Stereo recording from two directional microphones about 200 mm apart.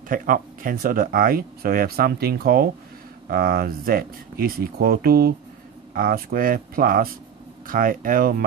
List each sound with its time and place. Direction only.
0.1 s speech: 45° right (ahead or behind)